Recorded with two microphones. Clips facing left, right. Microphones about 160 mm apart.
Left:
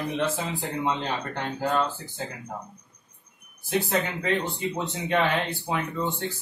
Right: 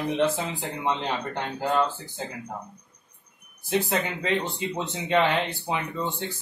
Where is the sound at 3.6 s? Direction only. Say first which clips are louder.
Even; 15° right (ahead or behind).